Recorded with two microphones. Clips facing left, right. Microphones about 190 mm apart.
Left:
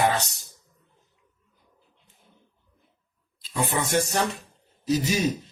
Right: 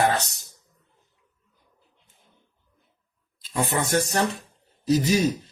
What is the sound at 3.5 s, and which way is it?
Speech, 45° right (ahead or behind).